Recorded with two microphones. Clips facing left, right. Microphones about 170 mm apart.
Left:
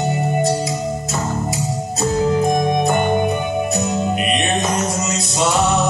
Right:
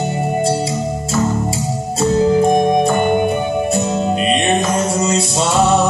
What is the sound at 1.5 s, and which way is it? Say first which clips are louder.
Music: right 2 dB; 30° right (ahead or behind).